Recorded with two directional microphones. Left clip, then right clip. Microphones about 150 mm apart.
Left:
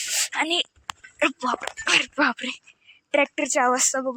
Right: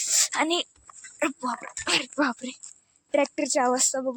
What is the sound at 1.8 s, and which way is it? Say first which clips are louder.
Speech: left 4 dB; 20° right (ahead or behind).